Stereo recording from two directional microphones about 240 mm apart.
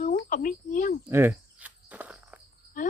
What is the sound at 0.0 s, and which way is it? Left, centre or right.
Speech, left.